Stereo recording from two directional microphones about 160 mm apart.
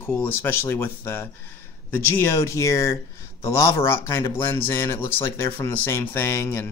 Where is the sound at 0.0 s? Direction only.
15° left (ahead or behind).